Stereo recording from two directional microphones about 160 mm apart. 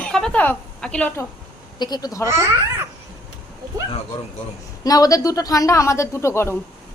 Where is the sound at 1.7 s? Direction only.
25° left (ahead or behind).